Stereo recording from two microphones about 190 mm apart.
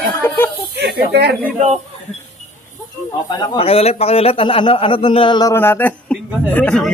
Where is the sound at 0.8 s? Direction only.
60° right (ahead or behind).